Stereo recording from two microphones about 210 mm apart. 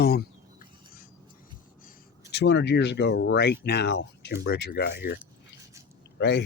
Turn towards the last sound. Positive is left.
turn(degrees=55)  # may be behind; listen again after turning